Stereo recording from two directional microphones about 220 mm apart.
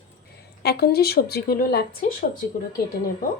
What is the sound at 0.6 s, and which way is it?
Speech, 45° left (ahead or behind).